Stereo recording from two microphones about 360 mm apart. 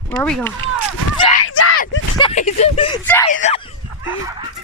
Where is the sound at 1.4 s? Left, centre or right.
Left.